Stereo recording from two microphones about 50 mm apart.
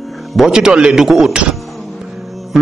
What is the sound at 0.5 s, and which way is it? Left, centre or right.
Speech, centre.